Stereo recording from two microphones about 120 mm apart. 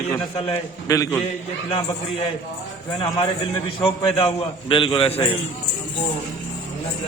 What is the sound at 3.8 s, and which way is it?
A man's voice, 50° left (ahead or behind).